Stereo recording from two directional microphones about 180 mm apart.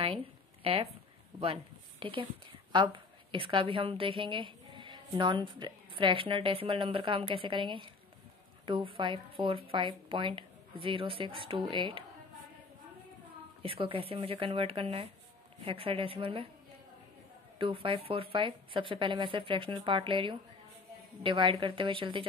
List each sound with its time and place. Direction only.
1.4 s a woman's voice: 30° right (ahead or behind)
13.6 s speech: 30° right (ahead or behind)
17.6 s speech: 30° right (ahead or behind)